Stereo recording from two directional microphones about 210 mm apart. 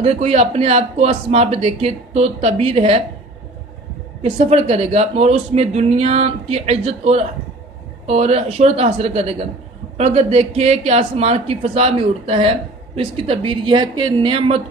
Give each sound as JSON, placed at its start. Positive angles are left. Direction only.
{"t": 0.0, "sound": "speech", "side_deg": -30}
{"t": 4.2, "sound": "speech", "side_deg": -30}